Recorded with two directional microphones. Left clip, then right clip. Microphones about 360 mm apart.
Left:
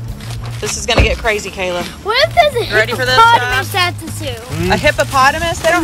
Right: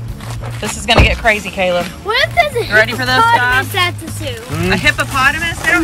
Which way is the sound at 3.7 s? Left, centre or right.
Centre.